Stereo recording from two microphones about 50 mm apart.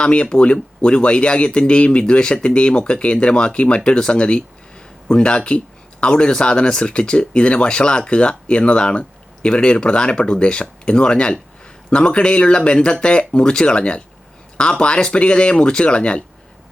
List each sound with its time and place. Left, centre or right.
0.0 s speech: left